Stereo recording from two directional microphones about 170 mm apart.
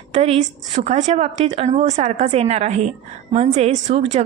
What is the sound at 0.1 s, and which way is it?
A woman's voice, 35° right (ahead or behind).